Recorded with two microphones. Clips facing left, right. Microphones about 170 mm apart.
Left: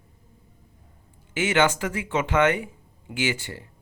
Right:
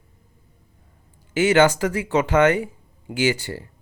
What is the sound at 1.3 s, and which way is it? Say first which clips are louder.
Speech: right 6 dB; 40° right (ahead or behind).